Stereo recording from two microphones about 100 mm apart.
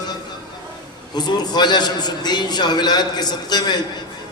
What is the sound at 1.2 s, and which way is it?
A man's voice, 45° left (ahead or behind).